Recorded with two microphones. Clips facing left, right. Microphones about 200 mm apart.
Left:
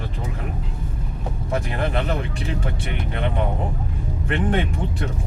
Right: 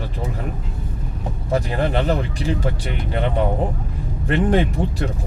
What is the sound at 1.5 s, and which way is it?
Speech, 35° right (ahead or behind).